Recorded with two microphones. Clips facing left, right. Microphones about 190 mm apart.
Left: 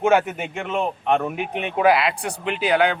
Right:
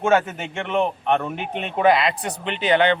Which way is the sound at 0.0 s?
10° left (ahead or behind).